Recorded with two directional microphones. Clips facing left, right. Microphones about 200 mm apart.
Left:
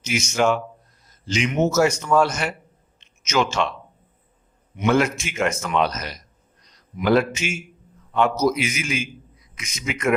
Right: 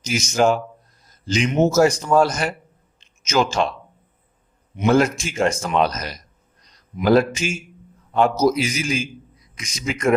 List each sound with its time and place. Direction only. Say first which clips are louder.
0.0 s a man's voice: right 2 dB; 35° right (ahead or behind)
4.8 s a man's voice: right 3 dB; 35° right (ahead or behind)